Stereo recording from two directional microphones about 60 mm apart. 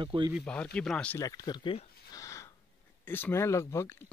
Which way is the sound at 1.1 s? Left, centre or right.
Left.